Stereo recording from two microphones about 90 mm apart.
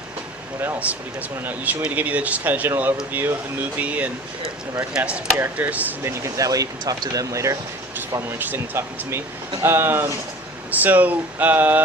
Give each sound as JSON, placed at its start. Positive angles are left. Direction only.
{"t": 0.6, "sound": "speech", "side_deg": -25}
{"t": 6.0, "sound": "speech", "side_deg": -30}
{"t": 8.3, "sound": "speech", "side_deg": -25}